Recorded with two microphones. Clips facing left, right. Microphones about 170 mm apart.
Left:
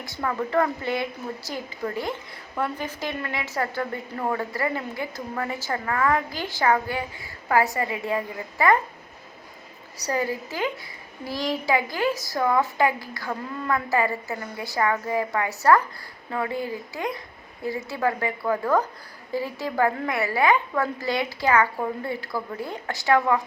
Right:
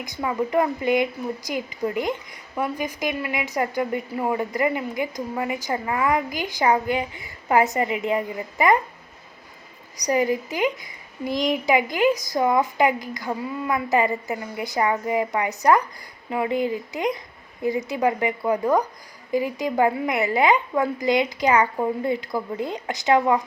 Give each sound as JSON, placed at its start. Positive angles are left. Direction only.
{"t": 0.0, "sound": "a woman's voice", "side_deg": -15}
{"t": 10.0, "sound": "a woman's voice", "side_deg": -15}